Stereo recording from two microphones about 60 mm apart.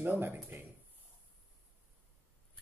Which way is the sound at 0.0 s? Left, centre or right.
Right.